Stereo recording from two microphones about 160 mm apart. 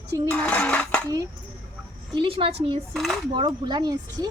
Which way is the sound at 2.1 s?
35° right (ahead or behind).